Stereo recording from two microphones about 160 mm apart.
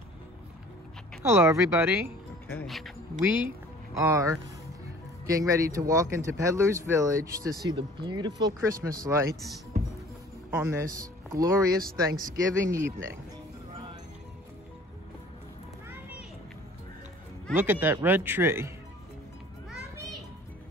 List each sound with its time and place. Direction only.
1.2 s speech: 15° right (ahead or behind)
2.6 s speech: centre (ahead or behind)
3.9 s speech: 20° right (ahead or behind)
10.5 s speech: 15° right (ahead or behind)
11.8 s speech: 65° right (ahead or behind)
15.9 s children playing: 10° right (ahead or behind)
17.6 s speech: 10° right (ahead or behind)